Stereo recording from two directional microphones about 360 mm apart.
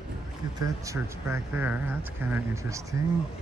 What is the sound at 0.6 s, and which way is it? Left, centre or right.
Speech, centre.